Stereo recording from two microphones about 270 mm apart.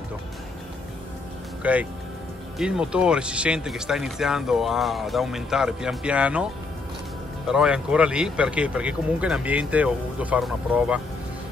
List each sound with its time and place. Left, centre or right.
1.6 s speech: centre
7.4 s speech: centre